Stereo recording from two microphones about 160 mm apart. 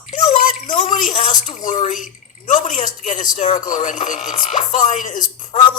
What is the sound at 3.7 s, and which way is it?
Speech, 50° left (ahead or behind).